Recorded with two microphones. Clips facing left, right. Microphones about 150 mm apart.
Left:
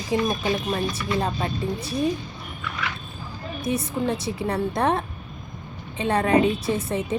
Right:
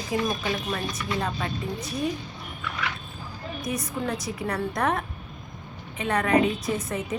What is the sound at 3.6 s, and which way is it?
Speech, 25° left (ahead or behind).